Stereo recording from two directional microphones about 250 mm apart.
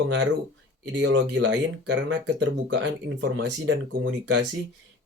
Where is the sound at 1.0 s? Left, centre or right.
Right.